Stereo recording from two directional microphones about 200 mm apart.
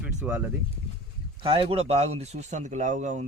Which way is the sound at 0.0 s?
5° right (ahead or behind).